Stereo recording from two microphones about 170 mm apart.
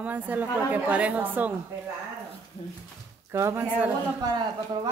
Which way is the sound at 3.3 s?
15° right (ahead or behind).